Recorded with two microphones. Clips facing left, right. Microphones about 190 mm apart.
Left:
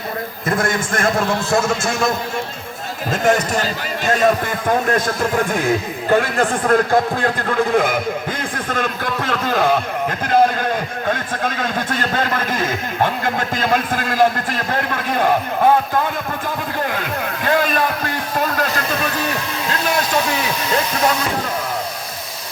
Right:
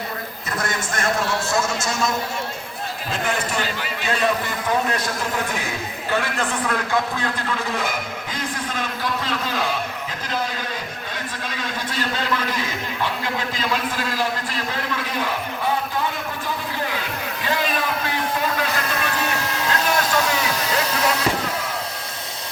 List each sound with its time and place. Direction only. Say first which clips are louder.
0.5 s a man's voice: left 6 dB; 50° left (ahead or behind)
3.1 s a man's voice: left 9 dB; 45° left (ahead or behind)
6.1 s a man's voice: left 8 dB; 50° left (ahead or behind)
16.9 s a sound: left 5 dB; 50° left (ahead or behind)